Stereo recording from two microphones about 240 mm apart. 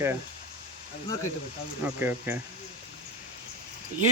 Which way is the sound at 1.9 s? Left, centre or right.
Centre.